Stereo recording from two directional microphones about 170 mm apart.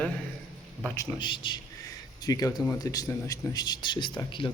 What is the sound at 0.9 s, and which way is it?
A man's voice, 30° left (ahead or behind).